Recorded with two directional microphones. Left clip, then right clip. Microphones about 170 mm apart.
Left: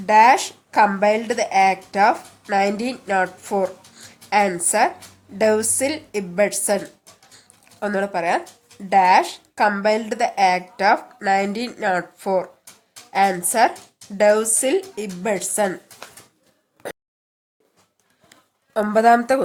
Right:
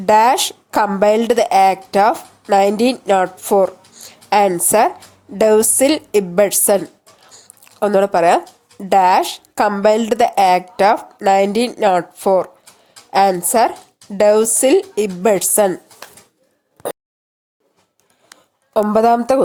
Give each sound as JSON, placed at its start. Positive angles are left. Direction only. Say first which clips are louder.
{"t": 0.0, "sound": "speech", "louder": "right 2 dB", "side_deg": -40}
{"t": 4.1, "sound": "a sound", "louder": "right 5 dB", "side_deg": -40}
{"t": 5.4, "sound": "speech", "louder": "right 6 dB", "side_deg": -40}
{"t": 13.1, "sound": "a sound", "louder": "right 5 dB", "side_deg": -35}
{"t": 13.5, "sound": "speech", "louder": "right 3 dB", "side_deg": -35}
{"t": 18.9, "sound": "speech", "louder": "right 1 dB", "side_deg": -25}